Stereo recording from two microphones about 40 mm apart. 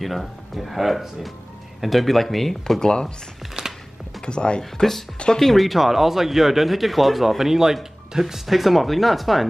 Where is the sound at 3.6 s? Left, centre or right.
Centre.